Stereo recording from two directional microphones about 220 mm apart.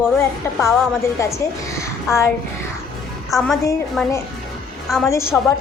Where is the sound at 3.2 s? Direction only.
Centre (ahead or behind).